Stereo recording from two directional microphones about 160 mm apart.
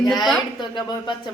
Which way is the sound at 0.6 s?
30° left (ahead or behind).